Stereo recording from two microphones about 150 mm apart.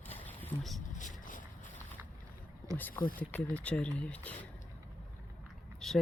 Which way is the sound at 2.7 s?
10° left (ahead or behind).